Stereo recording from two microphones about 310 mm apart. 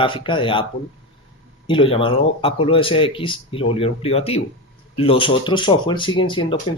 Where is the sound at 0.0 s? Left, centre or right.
Centre.